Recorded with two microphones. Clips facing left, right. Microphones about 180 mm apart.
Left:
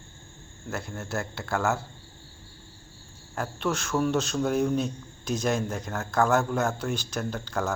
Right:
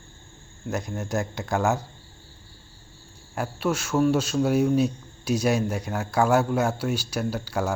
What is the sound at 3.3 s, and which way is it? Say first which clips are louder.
Speech: right 3 dB; 10° right (ahead or behind).